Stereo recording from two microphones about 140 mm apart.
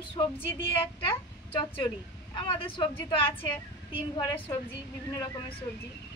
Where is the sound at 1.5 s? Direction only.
35° left (ahead or behind).